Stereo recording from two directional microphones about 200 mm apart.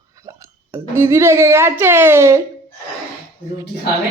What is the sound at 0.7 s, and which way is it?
Speech, 15° right (ahead or behind).